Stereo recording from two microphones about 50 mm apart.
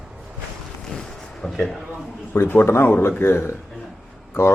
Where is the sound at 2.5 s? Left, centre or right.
Left.